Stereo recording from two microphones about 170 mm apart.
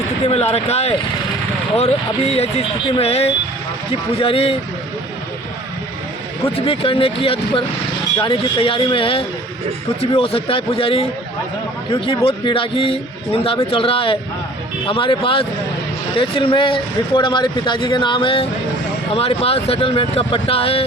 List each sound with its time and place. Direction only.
0.3 s a man's voice: 35° left (ahead or behind)
6.7 s a man's voice: 35° left (ahead or behind)